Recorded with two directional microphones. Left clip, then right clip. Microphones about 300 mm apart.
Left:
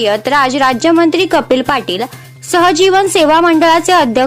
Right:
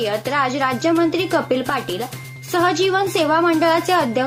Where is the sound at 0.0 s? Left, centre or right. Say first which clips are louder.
Left 9 dB; left.